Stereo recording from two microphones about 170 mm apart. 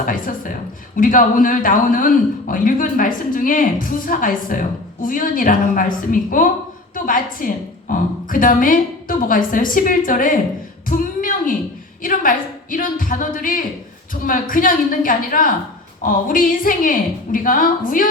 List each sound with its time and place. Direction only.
0.0 s a woman's voice: 50° left (ahead or behind)
10.8 s a sound: 55° left (ahead or behind)
12.0 s a woman's voice: 50° left (ahead or behind)